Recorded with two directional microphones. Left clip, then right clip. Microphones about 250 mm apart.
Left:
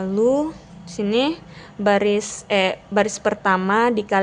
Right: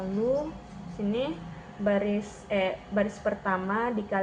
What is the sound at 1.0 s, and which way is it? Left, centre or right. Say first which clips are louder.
A woman's voice: left 10 dB; left.